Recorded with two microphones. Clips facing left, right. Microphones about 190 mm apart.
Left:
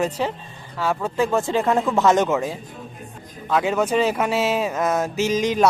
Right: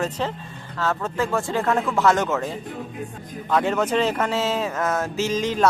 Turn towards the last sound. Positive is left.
turn(degrees=15)  # may be behind; listen again after turning